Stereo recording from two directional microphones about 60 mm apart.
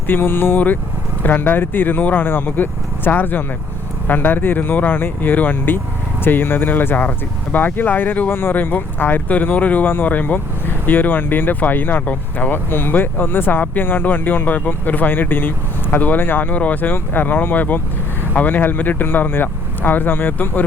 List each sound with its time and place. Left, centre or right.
0.1 s speech: left